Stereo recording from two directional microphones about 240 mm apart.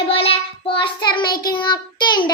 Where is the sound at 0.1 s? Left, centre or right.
Left.